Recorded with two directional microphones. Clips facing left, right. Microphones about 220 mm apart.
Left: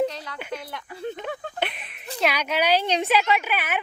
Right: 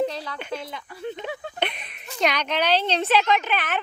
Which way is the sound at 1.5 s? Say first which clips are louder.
Right 1 dB; 5° left (ahead or behind).